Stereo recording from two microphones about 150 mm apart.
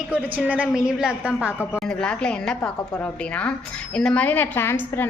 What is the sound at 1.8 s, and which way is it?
A woman's voice, 5° left (ahead or behind).